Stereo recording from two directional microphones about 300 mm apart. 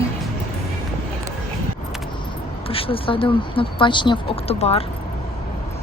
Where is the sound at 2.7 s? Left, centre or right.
Centre.